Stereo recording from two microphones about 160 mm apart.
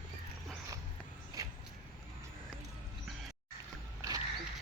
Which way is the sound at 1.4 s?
20° right (ahead or behind).